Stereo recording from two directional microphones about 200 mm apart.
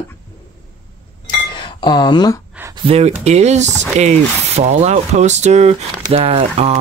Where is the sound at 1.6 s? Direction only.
20° left (ahead or behind).